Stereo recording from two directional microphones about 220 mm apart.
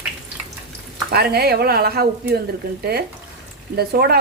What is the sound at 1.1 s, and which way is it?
Speech, 45° right (ahead or behind).